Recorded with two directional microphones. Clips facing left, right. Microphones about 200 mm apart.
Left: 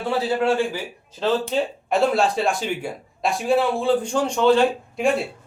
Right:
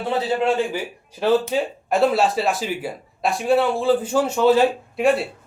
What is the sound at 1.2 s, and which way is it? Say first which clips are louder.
Speech: right 3 dB; 5° right (ahead or behind).